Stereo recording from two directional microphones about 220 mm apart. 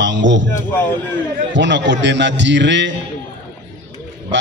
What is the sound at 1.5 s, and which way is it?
A man's voice, 55° right (ahead or behind).